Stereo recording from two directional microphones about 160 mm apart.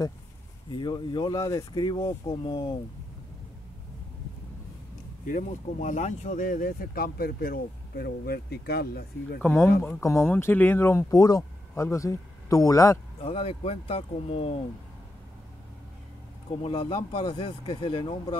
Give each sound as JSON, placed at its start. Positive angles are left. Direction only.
{"t": 0.7, "sound": "speech", "side_deg": 30}
{"t": 5.2, "sound": "speech", "side_deg": 55}
{"t": 9.4, "sound": "speech", "side_deg": 15}
{"t": 13.2, "sound": "speech", "side_deg": 35}
{"t": 16.6, "sound": "speech", "side_deg": 35}